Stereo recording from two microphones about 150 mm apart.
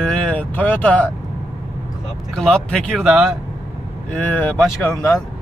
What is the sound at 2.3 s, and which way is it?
Speech, 5° left (ahead or behind).